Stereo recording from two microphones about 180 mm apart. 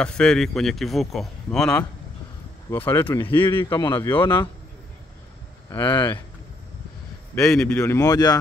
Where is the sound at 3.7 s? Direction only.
25° left (ahead or behind).